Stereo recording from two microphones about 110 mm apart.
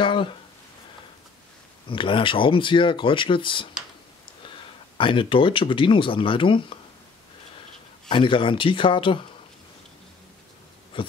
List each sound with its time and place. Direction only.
0.0 s speech: 50° left (ahead or behind)
1.9 s speech: 50° left (ahead or behind)
4.9 s speech: 50° left (ahead or behind)
8.1 s speech: 50° left (ahead or behind)
10.9 s a sound: 50° left (ahead or behind)